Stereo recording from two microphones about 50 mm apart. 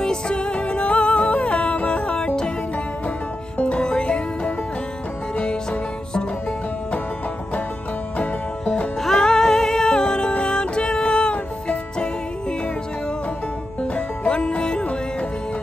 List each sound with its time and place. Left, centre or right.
0.0 s music: centre
3.5 s music: left
8.2 s music: left
9.0 s music: centre
13.7 s music: left